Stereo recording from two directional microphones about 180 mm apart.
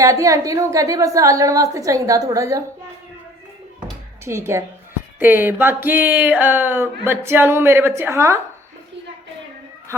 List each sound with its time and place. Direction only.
0.0 s speech: 20° right (ahead or behind)
4.3 s speech: 15° right (ahead or behind)